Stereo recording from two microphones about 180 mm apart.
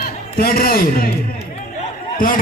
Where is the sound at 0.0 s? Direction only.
55° left (ahead or behind).